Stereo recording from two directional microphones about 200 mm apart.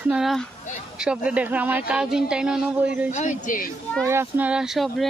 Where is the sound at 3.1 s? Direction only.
35° left (ahead or behind).